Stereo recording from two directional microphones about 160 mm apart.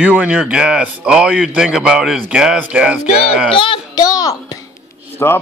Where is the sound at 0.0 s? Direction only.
10° right (ahead or behind).